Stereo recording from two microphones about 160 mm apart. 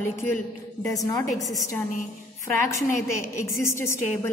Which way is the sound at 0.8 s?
20° left (ahead or behind).